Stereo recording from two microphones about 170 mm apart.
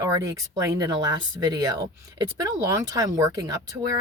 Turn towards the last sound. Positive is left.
turn(degrees=-20)  # may be behind; listen again after turning